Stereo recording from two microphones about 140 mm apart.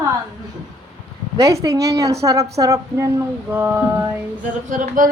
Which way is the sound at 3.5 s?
15° right (ahead or behind).